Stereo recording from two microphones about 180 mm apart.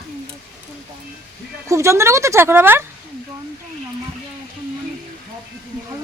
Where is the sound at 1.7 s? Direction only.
15° right (ahead or behind).